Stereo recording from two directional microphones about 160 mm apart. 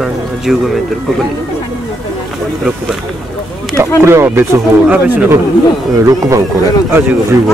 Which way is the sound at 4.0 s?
15° right (ahead or behind).